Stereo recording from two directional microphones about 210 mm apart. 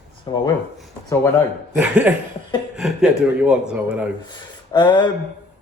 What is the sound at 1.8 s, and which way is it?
A man's voice, 5° right (ahead or behind).